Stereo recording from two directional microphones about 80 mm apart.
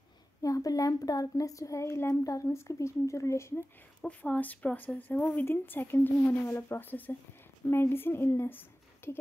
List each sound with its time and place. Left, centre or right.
0.4 s a woman's voice: left
4.0 s speech: centre